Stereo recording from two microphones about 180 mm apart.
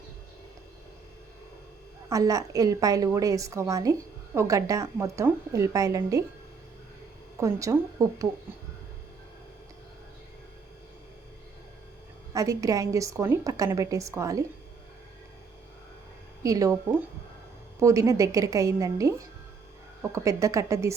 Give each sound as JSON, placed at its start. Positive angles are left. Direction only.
{"t": 2.0, "sound": "a woman's voice", "side_deg": -20}
{"t": 7.3, "sound": "a woman's voice", "side_deg": -15}
{"t": 12.3, "sound": "a woman's voice", "side_deg": -20}
{"t": 16.4, "sound": "a woman's voice", "side_deg": -20}
{"t": 17.7, "sound": "a woman's voice", "side_deg": -15}